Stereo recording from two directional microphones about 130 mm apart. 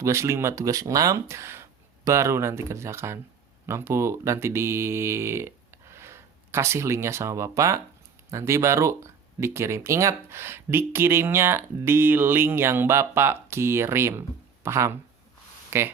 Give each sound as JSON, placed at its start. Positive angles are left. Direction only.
{"t": 0.0, "sound": "speech", "side_deg": -20}